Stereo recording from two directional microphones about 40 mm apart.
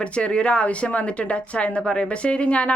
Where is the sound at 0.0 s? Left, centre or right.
Left.